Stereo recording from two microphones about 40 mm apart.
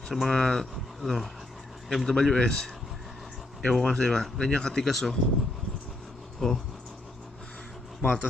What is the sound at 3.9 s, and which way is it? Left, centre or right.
Speech, centre.